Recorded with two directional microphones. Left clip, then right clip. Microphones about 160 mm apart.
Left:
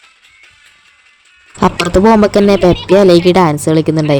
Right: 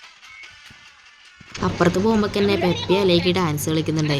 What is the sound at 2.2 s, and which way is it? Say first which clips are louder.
Speech: left 11 dB; 50° left (ahead or behind).